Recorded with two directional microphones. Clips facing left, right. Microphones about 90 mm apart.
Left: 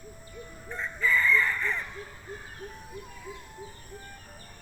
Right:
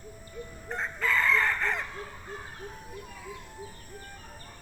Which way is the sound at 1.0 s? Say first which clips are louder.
Left 1 dB; 90° right.